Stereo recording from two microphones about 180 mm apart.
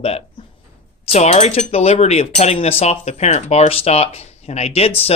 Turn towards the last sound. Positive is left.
turn(degrees=35)  # may be behind; listen again after turning